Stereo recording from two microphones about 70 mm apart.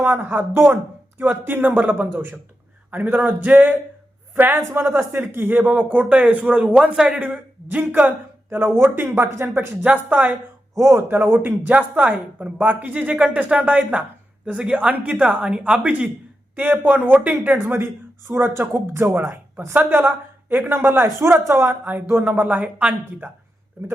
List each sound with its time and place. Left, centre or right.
0.0 s speech: right; by 7.2 s centre
7.2 s a man's voice: right
10.8 s speech: right
11.2 s a man's voice: right